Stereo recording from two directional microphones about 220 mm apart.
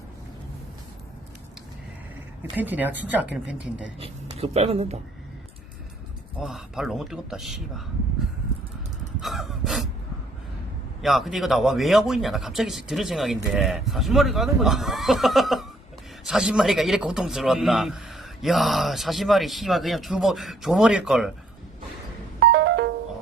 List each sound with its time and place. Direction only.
2.6 s a man's voice: 10° right (ahead or behind)
4.0 s speech: 25° right (ahead or behind)
6.4 s a man's voice: centre (ahead or behind)
9.2 s gasp: centre (ahead or behind)
11.0 s a man's voice: centre (ahead or behind)
22.5 s music: 50° right (ahead or behind)